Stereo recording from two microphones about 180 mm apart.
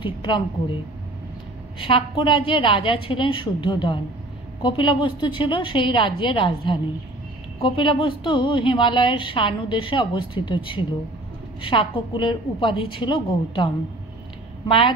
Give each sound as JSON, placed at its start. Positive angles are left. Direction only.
{"t": 0.0, "sound": "a woman's voice", "side_deg": 25}
{"t": 1.8, "sound": "a woman's voice", "side_deg": 30}